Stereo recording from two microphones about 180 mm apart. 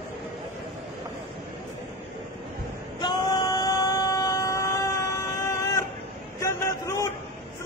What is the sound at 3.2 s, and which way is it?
Vehicle, 20° left (ahead or behind).